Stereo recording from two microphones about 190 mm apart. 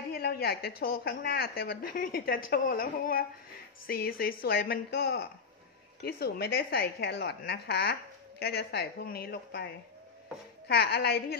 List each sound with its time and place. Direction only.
0.1 s a woman's voice: 55° left (ahead or behind)
10.7 s a woman's voice: 60° left (ahead or behind)